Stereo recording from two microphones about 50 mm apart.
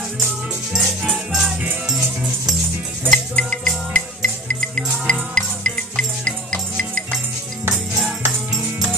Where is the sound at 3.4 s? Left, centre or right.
Centre.